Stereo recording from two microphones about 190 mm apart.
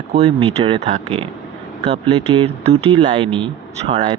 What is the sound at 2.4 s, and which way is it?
Speech, 30° right (ahead or behind).